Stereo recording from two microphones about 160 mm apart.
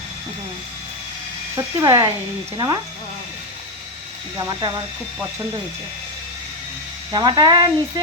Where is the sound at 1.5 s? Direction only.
20° right (ahead or behind).